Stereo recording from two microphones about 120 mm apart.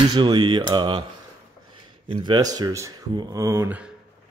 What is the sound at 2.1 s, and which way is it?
Speech, 40° right (ahead or behind).